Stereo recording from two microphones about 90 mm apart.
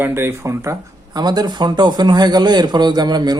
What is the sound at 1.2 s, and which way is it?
A man's voice, 50° right (ahead or behind).